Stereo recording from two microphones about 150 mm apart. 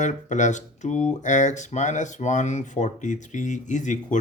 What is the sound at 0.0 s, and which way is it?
Speech, 55° left (ahead or behind).